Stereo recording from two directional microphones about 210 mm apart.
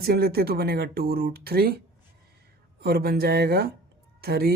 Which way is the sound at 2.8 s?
50° right (ahead or behind).